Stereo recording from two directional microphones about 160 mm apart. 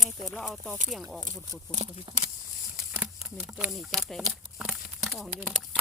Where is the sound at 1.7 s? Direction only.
25° left (ahead or behind).